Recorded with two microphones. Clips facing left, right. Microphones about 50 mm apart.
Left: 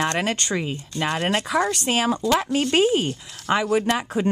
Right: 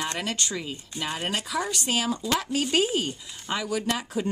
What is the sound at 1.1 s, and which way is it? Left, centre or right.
Speech, left.